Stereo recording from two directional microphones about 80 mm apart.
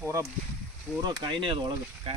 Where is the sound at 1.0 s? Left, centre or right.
Right.